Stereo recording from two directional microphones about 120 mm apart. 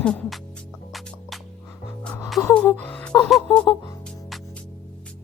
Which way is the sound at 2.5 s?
10° left (ahead or behind).